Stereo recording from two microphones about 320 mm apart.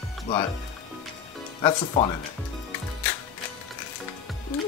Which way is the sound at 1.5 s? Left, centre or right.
Centre.